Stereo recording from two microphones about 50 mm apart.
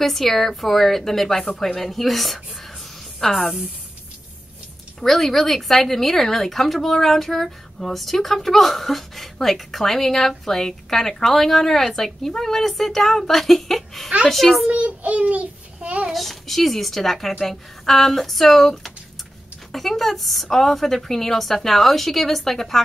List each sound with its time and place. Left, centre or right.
0.0 s a woman's voice: centre
5.0 s a woman's voice: centre
14.7 s child singing: right
16.1 s a woman's voice: centre